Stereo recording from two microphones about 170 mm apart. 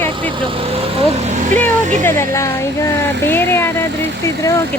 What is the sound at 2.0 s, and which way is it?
Speech, 15° left (ahead or behind).